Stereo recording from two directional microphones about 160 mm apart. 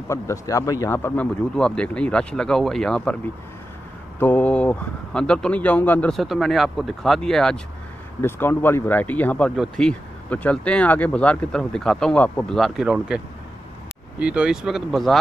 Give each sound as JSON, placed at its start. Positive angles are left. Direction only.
{"t": 0.1, "sound": "speech", "side_deg": 20}
{"t": 4.2, "sound": "speech", "side_deg": 10}
{"t": 8.2, "sound": "speech", "side_deg": 15}
{"t": 14.2, "sound": "speech", "side_deg": -5}